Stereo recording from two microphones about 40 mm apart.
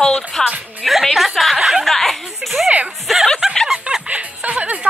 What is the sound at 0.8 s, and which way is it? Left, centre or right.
Music, centre.